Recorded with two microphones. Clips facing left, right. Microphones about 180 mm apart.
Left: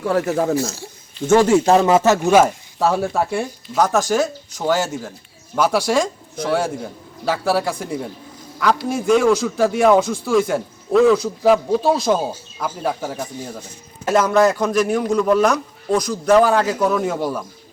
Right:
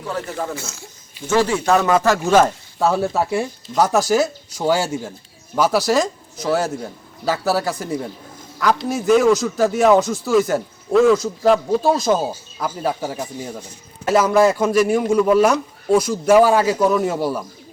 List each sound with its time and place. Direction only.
0.1 s speech: 60° left (ahead or behind)
0.3 s speech: 40° left (ahead or behind)
1.3 s speech: 50° left (ahead or behind)
1.5 s speech: 30° left (ahead or behind)
2.3 s a man's voice: 5° left (ahead or behind)